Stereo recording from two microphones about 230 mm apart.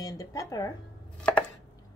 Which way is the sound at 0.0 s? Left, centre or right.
Centre.